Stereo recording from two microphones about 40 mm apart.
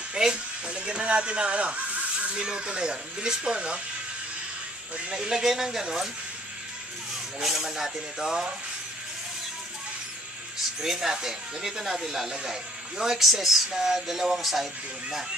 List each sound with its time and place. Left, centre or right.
0.1 s speech: right
2.3 s speech: centre
5.1 s speech: centre
7.4 s speech: centre
10.8 s speech: centre
13.2 s speech: centre